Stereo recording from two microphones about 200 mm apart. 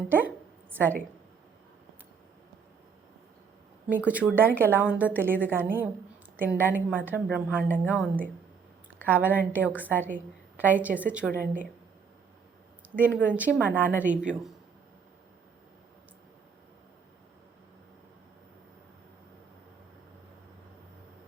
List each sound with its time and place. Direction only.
0.1 s a sound: 10° right (ahead or behind)
3.8 s a woman's voice: 10° right (ahead or behind)
9.7 s a woman's voice: 10° left (ahead or behind)
10.6 s a woman's voice: 10° right (ahead or behind)
11.3 s speech: 40° right (ahead or behind)
13.0 s a woman's voice: 5° right (ahead or behind)